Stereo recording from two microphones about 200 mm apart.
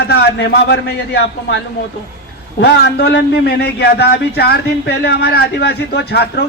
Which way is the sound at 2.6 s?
55° left (ahead or behind).